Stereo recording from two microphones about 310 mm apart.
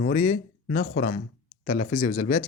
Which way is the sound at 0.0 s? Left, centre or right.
Left.